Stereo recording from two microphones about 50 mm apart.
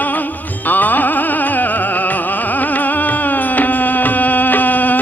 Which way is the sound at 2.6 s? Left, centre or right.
Left.